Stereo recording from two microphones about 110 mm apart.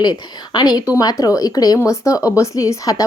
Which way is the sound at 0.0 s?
40° left (ahead or behind).